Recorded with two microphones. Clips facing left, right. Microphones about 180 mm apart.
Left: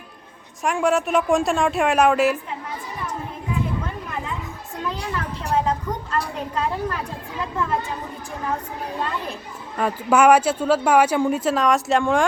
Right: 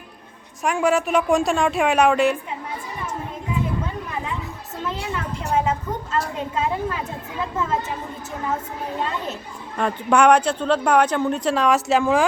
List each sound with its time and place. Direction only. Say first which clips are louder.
0.6 s speech: even; centre (ahead or behind)
5.5 s speech: even; 5° right (ahead or behind)
9.7 s speech: even; 5° left (ahead or behind)